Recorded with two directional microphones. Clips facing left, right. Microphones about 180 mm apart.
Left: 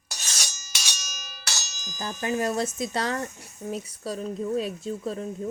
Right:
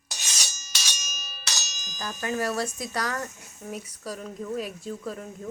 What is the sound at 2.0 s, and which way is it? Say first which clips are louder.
Speech: left 2 dB; 20° left (ahead or behind).